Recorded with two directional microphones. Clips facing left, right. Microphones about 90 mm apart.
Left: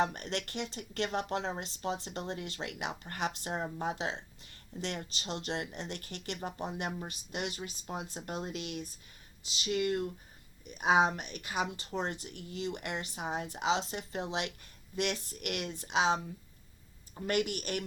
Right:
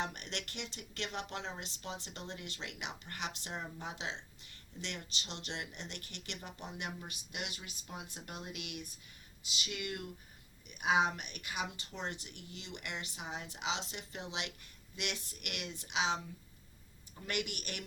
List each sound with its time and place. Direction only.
0.0 s speech: 40° left (ahead or behind)